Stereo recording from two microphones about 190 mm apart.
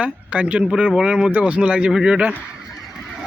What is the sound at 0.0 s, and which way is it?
Speech, 5° right (ahead or behind).